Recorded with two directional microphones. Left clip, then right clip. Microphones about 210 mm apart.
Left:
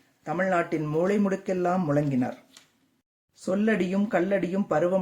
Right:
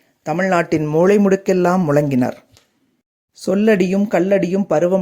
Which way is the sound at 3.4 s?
35° right (ahead or behind).